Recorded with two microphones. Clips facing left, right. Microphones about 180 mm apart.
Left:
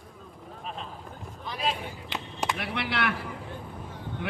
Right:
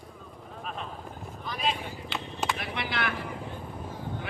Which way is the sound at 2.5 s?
65° left (ahead or behind).